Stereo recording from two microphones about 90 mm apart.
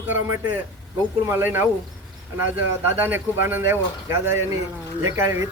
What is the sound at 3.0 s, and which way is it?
A man's voice, 25° right (ahead or behind).